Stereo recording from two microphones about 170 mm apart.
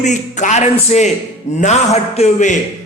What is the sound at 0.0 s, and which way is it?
A man's voice, 45° left (ahead or behind).